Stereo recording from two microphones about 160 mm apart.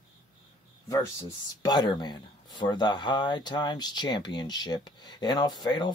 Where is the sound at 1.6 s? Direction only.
25° left (ahead or behind).